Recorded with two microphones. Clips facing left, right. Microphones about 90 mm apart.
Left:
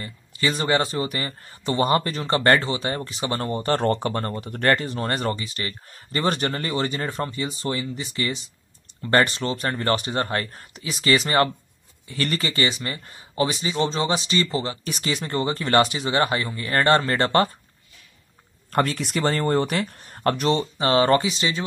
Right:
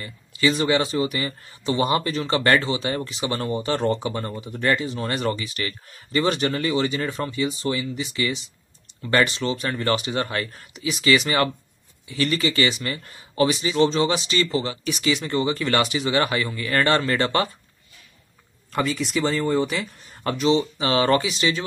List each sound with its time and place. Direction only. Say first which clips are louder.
0.0 s speech: right 3 dB; 35° left (ahead or behind)
18.7 s speech: left 1 dB; 50° left (ahead or behind); by 21.6 s 30° left (ahead or behind)